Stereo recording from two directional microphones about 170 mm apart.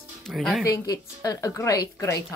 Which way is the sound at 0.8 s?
20° left (ahead or behind).